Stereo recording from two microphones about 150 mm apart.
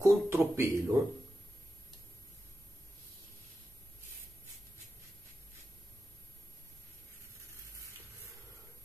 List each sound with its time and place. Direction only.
0.0 s speech: 15° right (ahead or behind)